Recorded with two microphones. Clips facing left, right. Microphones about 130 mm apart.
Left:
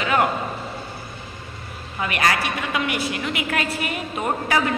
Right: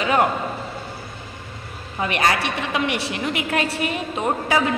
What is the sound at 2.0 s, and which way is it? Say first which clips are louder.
A woman's voice: right 1 dB; 25° right (ahead or behind).